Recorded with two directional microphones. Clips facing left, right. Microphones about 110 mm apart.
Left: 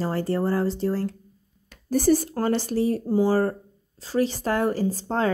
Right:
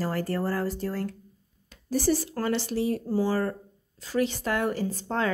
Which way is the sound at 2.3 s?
40° left (ahead or behind).